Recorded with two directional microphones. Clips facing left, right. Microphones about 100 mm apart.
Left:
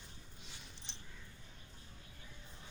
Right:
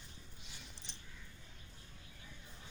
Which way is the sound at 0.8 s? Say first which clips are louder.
Even; 35° right (ahead or behind).